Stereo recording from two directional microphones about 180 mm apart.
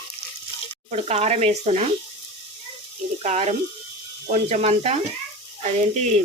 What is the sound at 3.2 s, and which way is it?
Speech, 35° right (ahead or behind).